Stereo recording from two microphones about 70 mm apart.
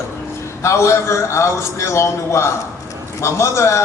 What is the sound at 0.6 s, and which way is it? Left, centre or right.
A man's voice, left.